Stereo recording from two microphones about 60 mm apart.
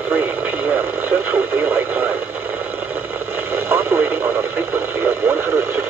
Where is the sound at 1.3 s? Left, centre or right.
Right.